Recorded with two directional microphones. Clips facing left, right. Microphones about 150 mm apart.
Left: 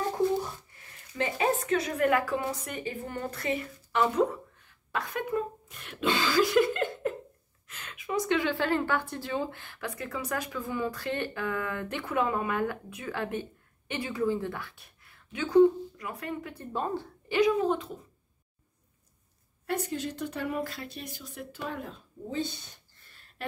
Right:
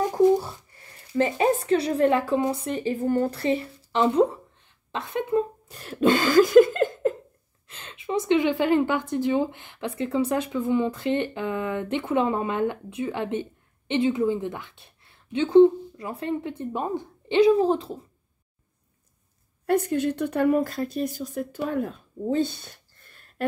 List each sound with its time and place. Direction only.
1.1 s a woman's voice: 35° right (ahead or behind)
7.6 s a woman's voice: 30° right (ahead or behind)
17.4 s speech: 30° right (ahead or behind)
19.6 s speech: 55° right (ahead or behind)
22.3 s a sound: 55° right (ahead or behind)